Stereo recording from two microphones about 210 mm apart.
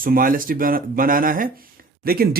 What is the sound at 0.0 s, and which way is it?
Speech, 40° right (ahead or behind).